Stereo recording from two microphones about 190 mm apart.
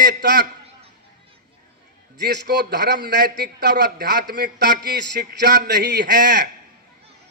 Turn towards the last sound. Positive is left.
turn(degrees=-60)  # may be behind; listen again after turning